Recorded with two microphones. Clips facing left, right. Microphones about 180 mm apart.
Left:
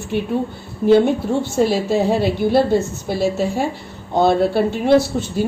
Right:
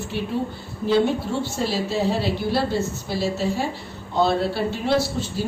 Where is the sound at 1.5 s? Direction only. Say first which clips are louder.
Left 9 dB; 55° left (ahead or behind).